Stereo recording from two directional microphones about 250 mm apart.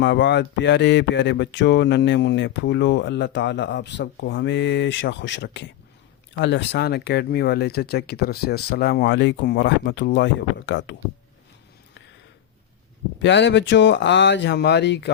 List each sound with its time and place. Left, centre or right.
0.0 s speech: left
13.1 s speech: left